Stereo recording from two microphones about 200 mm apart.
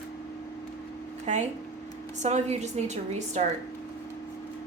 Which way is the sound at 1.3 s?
35° right (ahead or behind).